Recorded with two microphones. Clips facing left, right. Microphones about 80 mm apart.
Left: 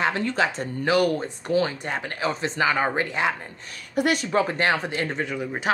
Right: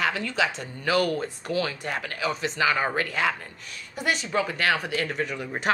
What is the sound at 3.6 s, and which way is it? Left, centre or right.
Speech, left.